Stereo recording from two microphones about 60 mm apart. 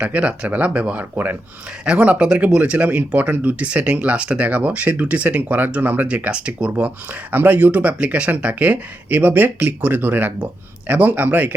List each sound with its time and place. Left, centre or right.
0.0 s speech: right
1.1 s speech: right
1.8 s speech: right